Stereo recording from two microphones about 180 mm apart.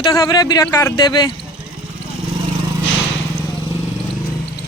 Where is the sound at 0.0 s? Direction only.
20° left (ahead or behind).